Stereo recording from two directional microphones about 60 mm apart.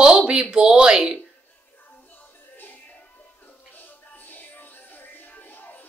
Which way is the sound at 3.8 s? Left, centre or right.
Left.